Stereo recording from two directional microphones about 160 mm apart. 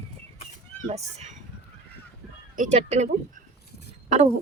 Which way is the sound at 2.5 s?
45° right (ahead or behind).